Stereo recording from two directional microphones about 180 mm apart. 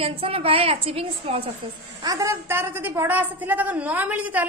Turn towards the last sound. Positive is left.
turn(degrees=-10)  # may be behind; listen again after turning